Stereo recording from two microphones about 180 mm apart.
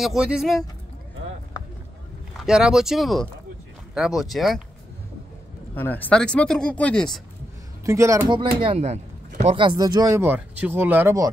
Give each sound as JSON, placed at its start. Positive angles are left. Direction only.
{"t": 0.0, "sound": "speech", "side_deg": -5}
{"t": 2.4, "sound": "speech", "side_deg": -5}
{"t": 5.8, "sound": "speech", "side_deg": 10}
{"t": 7.8, "sound": "speech", "side_deg": -15}